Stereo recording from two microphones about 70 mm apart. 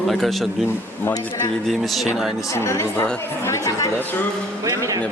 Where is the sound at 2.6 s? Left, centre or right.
Left.